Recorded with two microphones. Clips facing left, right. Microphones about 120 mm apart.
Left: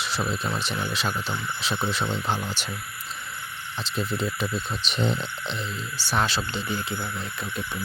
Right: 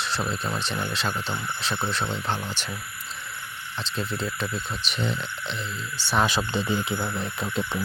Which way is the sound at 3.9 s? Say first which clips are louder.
Left 2 dB; 15° left (ahead or behind).